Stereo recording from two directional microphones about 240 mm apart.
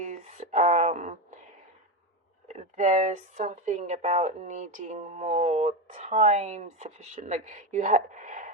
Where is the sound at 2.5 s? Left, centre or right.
Right.